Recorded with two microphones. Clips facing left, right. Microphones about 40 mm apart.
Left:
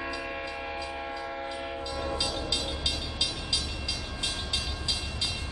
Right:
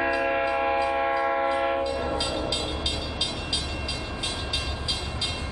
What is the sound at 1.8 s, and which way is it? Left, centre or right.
Train, centre.